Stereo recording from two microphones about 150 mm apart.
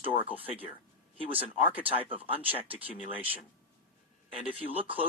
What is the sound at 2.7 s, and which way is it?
Speech, 10° right (ahead or behind).